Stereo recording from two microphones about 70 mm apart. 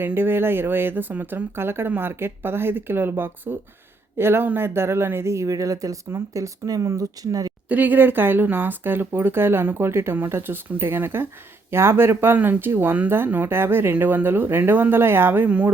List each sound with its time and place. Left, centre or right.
0.0 s speech: right
7.7 s speech: right